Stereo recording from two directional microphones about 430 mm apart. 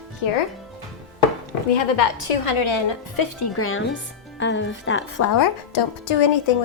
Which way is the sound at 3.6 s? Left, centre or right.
Left.